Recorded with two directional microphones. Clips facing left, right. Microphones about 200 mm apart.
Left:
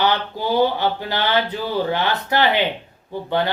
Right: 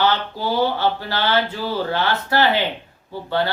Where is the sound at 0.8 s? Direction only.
15° left (ahead or behind).